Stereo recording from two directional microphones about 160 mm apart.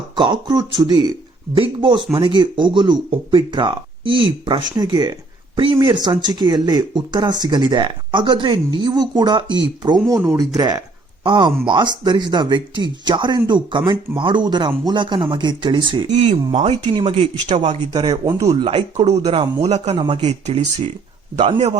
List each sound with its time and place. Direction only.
0.2 s speech: 25° right (ahead or behind)
10.1 s speech: 15° right (ahead or behind)
11.2 s speech: 30° right (ahead or behind)
16.1 s speech: 45° right (ahead or behind)
19.6 s speech: 45° right (ahead or behind)